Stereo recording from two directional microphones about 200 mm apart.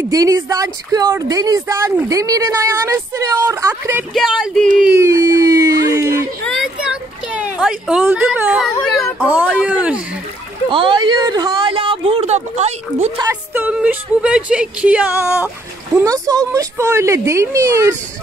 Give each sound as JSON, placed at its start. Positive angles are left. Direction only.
{"t": 0.1, "sound": "speech", "side_deg": -15}
{"t": 4.1, "sound": "speech", "side_deg": 0}
{"t": 6.4, "sound": "speech", "side_deg": 0}
{"t": 10.7, "sound": "speech", "side_deg": -25}
{"t": 13.2, "sound": "speech", "side_deg": -10}